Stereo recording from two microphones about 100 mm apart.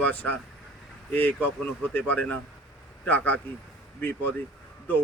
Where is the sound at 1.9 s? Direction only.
20° left (ahead or behind).